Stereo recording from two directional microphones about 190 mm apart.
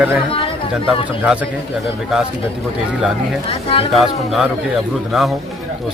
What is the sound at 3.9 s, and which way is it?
Speech, centre (ahead or behind).